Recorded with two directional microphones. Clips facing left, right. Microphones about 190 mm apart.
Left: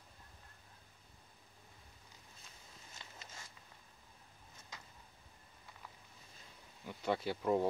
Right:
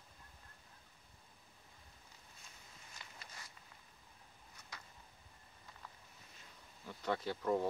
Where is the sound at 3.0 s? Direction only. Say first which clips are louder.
Left 1 dB; 25° left (ahead or behind).